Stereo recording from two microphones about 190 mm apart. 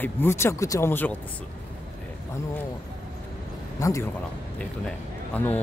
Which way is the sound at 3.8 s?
15° left (ahead or behind).